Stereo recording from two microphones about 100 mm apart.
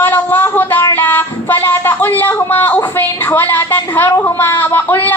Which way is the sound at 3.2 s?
20° left (ahead or behind).